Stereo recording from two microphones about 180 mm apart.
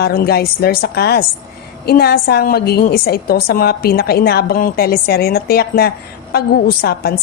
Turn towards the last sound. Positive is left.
turn(degrees=60)  # may be behind; listen again after turning